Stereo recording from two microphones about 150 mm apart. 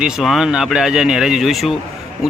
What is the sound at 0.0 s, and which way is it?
Speech, centre (ahead or behind).